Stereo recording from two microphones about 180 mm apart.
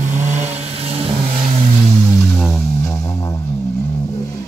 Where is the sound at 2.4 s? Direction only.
Centre (ahead or behind).